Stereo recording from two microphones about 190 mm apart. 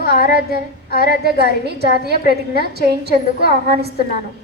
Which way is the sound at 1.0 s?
60° right (ahead or behind).